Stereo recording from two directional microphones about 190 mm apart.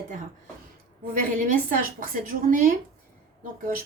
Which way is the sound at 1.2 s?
45° right (ahead or behind).